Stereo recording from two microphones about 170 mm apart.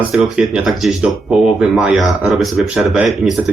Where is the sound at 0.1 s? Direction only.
5° right (ahead or behind).